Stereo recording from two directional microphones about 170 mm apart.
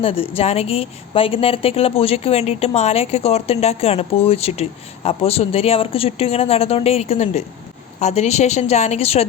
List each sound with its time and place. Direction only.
0.0 s speech: 35° left (ahead or behind)